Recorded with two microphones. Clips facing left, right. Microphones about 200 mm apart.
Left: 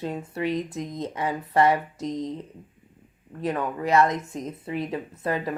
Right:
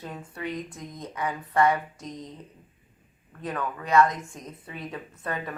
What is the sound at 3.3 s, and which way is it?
Speech, 25° left (ahead or behind).